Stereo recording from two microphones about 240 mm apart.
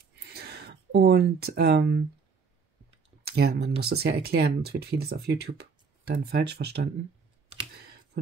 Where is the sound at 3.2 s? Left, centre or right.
Right.